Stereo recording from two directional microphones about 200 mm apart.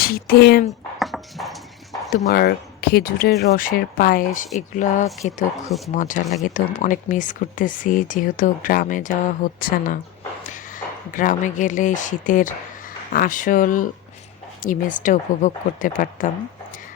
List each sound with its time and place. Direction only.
0.0 s speech: 50° left (ahead or behind)
0.9 s a sound: centre (ahead or behind)
2.3 s speech: 50° left (ahead or behind)